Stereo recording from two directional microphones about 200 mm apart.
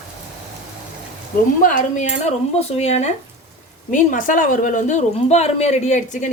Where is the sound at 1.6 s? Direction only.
40° left (ahead or behind).